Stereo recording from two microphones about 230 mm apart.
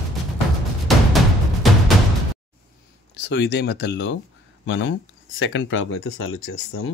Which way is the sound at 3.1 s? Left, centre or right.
Left.